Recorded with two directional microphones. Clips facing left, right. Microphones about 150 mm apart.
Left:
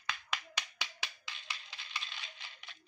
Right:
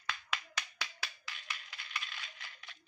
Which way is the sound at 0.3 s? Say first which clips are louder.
Even; 20° left (ahead or behind).